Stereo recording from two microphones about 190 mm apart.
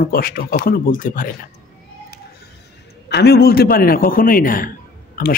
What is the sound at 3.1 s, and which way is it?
A man's voice, 60° left (ahead or behind).